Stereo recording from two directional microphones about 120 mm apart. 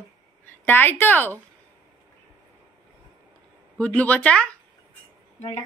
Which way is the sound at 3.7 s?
10° left (ahead or behind).